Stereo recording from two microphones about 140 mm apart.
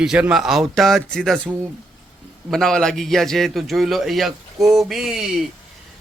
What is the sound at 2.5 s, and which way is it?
A man's voice, 5° left (ahead or behind).